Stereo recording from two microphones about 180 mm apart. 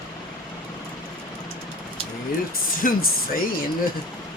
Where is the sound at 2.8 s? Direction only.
50° left (ahead or behind).